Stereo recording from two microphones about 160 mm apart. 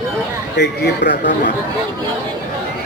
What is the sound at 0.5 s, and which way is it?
Speech, 90° left.